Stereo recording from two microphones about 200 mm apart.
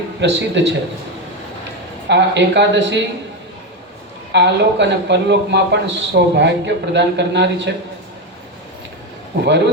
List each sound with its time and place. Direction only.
0.2 s speech: 60° right (ahead or behind)
2.0 s speech: 60° right (ahead or behind)
4.3 s speech: 60° right (ahead or behind)